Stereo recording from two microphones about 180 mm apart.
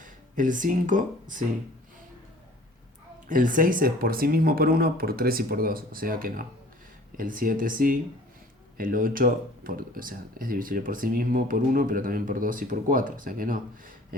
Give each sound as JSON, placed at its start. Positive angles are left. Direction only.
{"t": 0.0, "sound": "speech", "side_deg": -45}
{"t": 3.2, "sound": "speech", "side_deg": -50}